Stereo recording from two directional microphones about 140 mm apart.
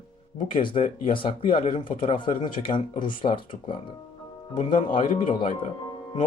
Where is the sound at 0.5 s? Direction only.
35° left (ahead or behind).